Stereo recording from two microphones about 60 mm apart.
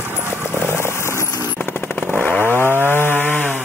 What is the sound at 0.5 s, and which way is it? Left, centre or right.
Vehicle, right.